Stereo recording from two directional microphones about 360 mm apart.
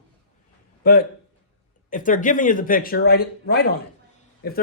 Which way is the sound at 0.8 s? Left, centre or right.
Left.